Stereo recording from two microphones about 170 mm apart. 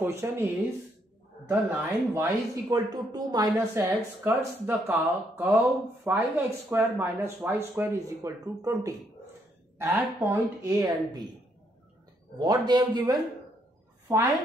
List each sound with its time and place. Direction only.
0.0 s speech: 15° right (ahead or behind)
1.5 s speech: 10° right (ahead or behind)
3.8 s speech: 10° right (ahead or behind)
12.4 s a woman's voice: 25° right (ahead or behind)